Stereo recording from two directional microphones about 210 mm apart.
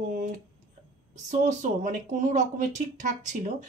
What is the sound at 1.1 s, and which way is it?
Speech, 35° right (ahead or behind).